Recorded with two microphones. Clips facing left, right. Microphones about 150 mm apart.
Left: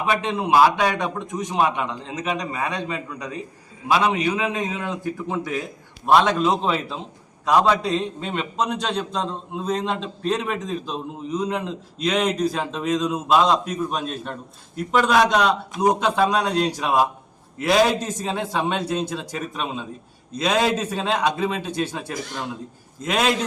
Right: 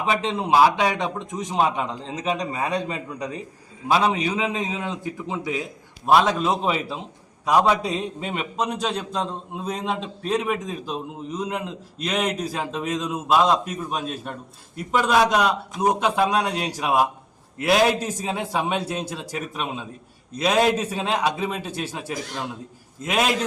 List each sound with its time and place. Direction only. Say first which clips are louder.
0.0 s a man's voice: left 1 dB; 25° right (ahead or behind)
4.8 s speech: left 2 dB; 20° right (ahead or behind)
6.1 s a man's voice: left 1 dB; 5° right (ahead or behind)